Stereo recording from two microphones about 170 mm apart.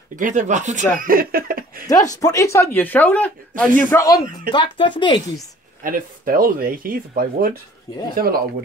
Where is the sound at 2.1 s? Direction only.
20° left (ahead or behind).